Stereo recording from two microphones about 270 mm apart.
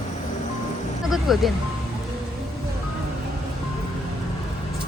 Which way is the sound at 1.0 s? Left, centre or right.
Centre.